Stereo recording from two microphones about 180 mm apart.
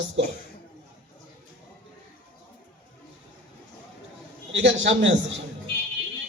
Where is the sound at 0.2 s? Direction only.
85° right.